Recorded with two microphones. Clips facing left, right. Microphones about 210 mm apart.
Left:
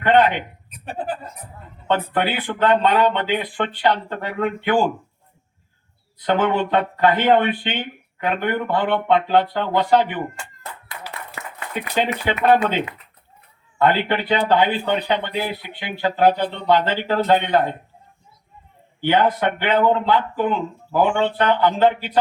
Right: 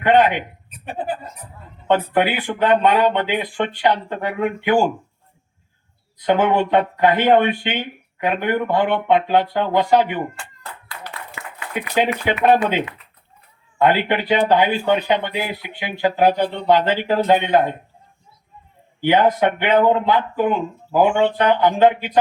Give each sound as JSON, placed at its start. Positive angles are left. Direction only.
{"t": 0.0, "sound": "speech", "side_deg": -15}
{"t": 1.9, "sound": "speech", "side_deg": -15}
{"t": 6.2, "sound": "speech", "side_deg": -15}
{"t": 11.4, "sound": "a sound", "side_deg": 40}
{"t": 12.2, "sound": "speech", "side_deg": -10}
{"t": 18.9, "sound": "speech", "side_deg": -15}